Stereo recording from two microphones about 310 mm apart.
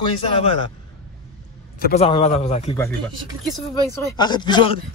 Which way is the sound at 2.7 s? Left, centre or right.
Centre.